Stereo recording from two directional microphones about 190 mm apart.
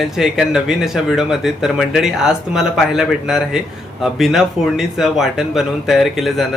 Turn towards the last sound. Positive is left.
turn(degrees=0)  # may be behind; listen again after turning